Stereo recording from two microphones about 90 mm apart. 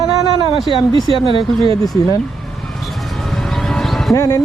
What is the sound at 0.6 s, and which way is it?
Speech, 85° right.